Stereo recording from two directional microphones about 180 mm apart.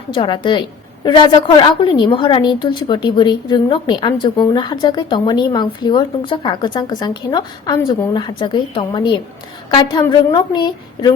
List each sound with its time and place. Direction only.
0.1 s a woman's voice: 25° left (ahead or behind)